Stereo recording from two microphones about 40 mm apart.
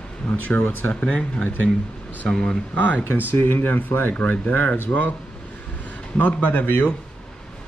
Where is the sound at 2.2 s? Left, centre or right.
Centre.